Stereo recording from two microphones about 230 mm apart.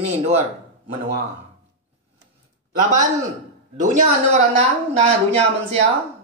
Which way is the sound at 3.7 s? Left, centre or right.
Right.